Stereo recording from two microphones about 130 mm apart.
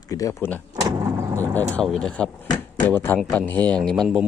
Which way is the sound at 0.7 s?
30° right (ahead or behind).